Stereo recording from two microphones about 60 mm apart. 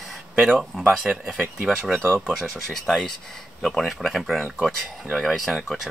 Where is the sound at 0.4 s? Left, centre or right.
Centre.